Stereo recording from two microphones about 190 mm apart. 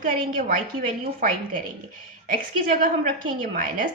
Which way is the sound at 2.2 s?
45° right (ahead or behind).